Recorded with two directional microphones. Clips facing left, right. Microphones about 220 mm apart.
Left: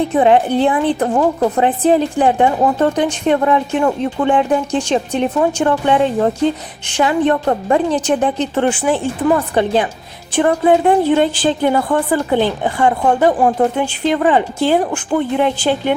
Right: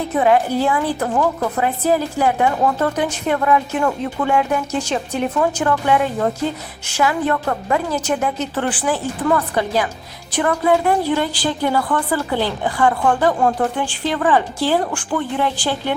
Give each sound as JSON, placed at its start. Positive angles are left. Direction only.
{"t": 0.1, "sound": "a woman's voice", "side_deg": 25}